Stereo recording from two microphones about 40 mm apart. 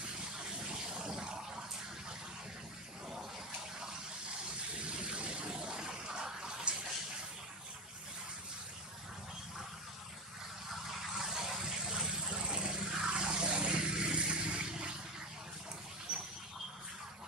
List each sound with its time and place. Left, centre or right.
0.4 s a sound: centre
4.8 s vehicle: right
5.5 s bathtub: centre
10.7 s vehicle: centre; by 14.9 s right